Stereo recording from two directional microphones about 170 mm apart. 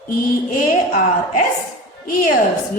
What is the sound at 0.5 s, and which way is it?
Speech, 50° left (ahead or behind).